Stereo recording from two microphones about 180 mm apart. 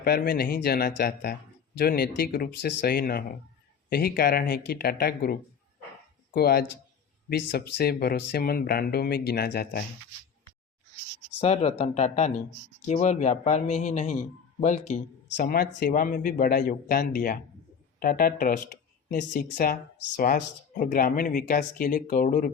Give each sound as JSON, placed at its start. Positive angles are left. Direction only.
{"t": 0.0, "sound": "speech", "side_deg": 60}
{"t": 11.3, "sound": "speech", "side_deg": 35}
{"t": 15.4, "sound": "speech", "side_deg": 55}